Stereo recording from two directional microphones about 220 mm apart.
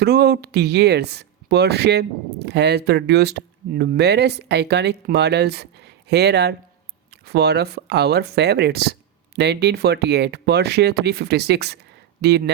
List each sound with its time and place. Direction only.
0.0 s speech: 45° right (ahead or behind)